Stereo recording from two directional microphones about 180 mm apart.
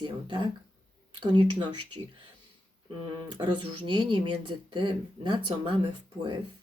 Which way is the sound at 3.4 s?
25° right (ahead or behind).